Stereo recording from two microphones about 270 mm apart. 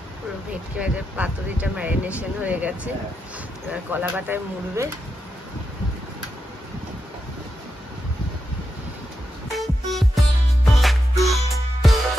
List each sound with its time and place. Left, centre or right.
0.7 s speech: centre
3.9 s speech: centre
9.5 s music: centre